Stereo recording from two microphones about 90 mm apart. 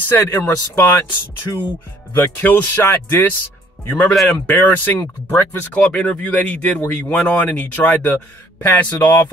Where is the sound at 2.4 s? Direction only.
20° left (ahead or behind).